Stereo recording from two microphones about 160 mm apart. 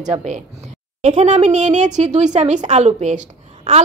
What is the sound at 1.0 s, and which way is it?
A woman's voice, 50° right (ahead or behind).